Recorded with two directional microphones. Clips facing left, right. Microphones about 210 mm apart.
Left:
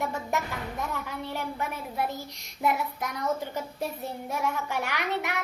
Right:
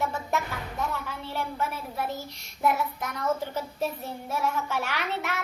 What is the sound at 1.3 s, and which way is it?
A woman's voice, 15° left (ahead or behind).